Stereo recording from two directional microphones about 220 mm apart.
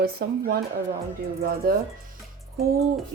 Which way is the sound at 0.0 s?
45° right (ahead or behind).